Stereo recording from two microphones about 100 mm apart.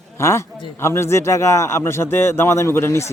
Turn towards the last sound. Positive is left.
turn(degrees=25)  # may be behind; listen again after turning